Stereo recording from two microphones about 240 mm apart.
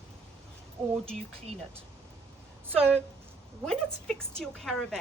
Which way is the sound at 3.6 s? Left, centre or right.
Centre.